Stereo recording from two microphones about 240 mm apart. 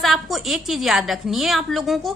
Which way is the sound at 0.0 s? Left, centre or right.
Centre.